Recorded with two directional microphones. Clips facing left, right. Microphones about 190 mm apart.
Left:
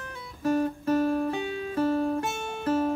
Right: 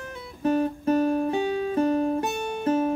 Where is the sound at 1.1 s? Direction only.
40° right (ahead or behind).